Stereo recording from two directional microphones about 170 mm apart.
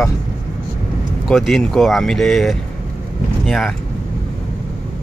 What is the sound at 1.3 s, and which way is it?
Speech, centre (ahead or behind).